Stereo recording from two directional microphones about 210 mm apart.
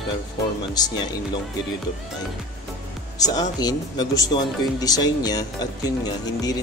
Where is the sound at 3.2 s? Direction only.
20° left (ahead or behind).